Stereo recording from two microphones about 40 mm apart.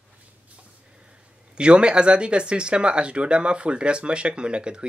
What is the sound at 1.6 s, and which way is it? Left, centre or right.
Speech, right.